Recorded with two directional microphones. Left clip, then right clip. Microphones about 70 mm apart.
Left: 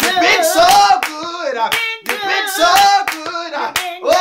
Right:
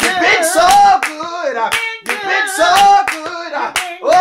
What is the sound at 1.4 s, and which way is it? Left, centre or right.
Hands, right.